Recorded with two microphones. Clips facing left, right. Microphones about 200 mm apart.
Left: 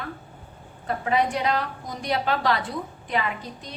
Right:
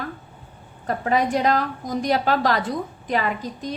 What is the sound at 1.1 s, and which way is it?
A woman's voice, 45° right (ahead or behind).